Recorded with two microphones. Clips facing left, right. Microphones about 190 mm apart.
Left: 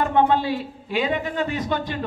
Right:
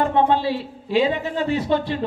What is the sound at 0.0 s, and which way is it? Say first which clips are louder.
A man's voice: right 1 dB; 30° right (ahead or behind).